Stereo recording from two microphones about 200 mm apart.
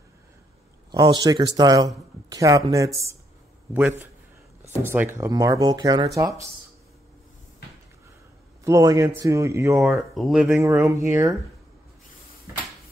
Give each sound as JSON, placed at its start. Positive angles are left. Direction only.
{"t": 0.9, "sound": "a man's voice", "side_deg": -20}
{"t": 8.6, "sound": "a man's voice", "side_deg": -15}
{"t": 9.8, "sound": "speech", "side_deg": 0}
{"t": 10.6, "sound": "a man's voice", "side_deg": -15}